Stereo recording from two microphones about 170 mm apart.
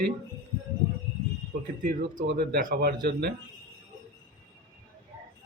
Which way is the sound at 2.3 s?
70° right (ahead or behind).